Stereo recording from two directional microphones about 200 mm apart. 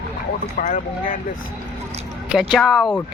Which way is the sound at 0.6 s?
40° left (ahead or behind).